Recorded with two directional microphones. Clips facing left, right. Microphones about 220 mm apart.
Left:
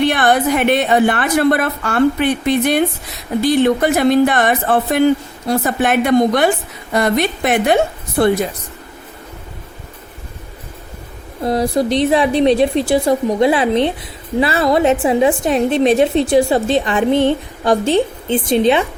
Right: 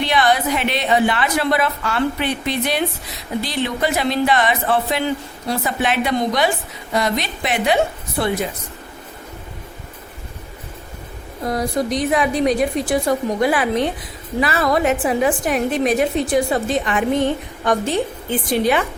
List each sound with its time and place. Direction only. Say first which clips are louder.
0.0 s a woman's voice: left 4 dB; 55° left (ahead or behind)
11.4 s a woman's voice: left 5 dB; 30° left (ahead or behind)